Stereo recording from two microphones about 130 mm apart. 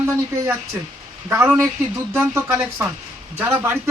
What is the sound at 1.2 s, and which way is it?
Speech, 15° right (ahead or behind).